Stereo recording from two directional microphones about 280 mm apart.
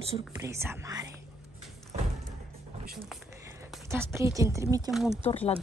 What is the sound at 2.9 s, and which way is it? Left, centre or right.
Speech, centre.